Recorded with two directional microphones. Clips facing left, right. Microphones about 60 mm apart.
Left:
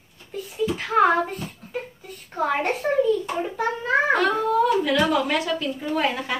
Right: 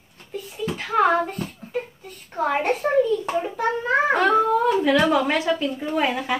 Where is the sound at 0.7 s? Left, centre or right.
Centre.